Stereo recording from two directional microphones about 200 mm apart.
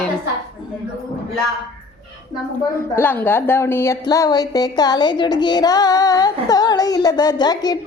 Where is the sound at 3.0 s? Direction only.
10° left (ahead or behind).